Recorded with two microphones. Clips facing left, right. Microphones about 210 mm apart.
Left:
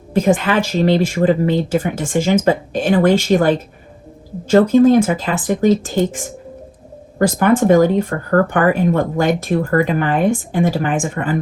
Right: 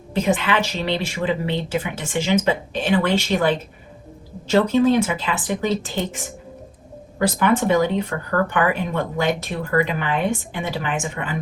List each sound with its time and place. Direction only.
0.1 s speech: 45° left (ahead or behind)